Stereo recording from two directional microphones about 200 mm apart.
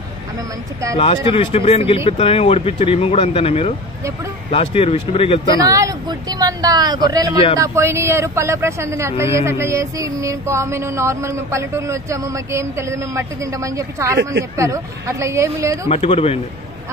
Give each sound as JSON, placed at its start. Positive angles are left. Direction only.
{"t": 0.9, "sound": "speech", "side_deg": 25}
{"t": 5.6, "sound": "speech", "side_deg": -15}
{"t": 7.5, "sound": "a sound", "side_deg": -15}
{"t": 15.9, "sound": "speech", "side_deg": 30}